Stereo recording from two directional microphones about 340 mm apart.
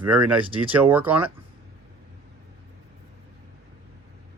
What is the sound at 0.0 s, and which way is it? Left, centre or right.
Speech, centre.